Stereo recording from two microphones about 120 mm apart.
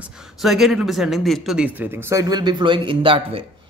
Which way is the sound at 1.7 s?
15° right (ahead or behind).